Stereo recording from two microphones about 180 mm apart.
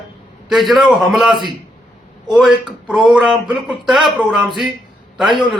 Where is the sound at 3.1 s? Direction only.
5° right (ahead or behind).